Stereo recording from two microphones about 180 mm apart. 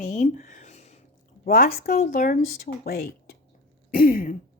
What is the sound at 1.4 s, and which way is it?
Speech, 55° left (ahead or behind).